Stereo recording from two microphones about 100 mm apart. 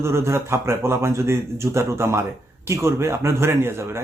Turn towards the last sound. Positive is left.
turn(degrees=-25)  # may be behind; listen again after turning